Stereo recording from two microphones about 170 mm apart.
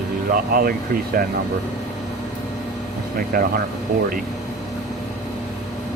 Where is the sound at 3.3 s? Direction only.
60° right (ahead or behind).